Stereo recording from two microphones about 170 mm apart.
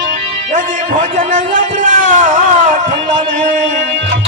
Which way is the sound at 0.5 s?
50° right (ahead or behind).